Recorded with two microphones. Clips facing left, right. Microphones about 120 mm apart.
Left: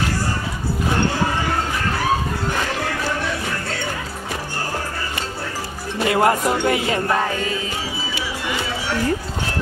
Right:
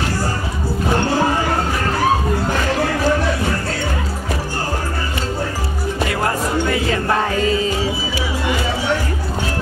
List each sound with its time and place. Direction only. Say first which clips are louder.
6.1 s music: left 5 dB; 20° left (ahead or behind)